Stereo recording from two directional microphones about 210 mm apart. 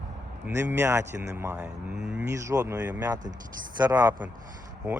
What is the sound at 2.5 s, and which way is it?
Speech, 15° right (ahead or behind).